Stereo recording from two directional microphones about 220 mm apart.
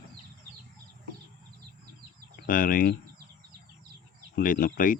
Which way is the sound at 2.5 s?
40° left (ahead or behind).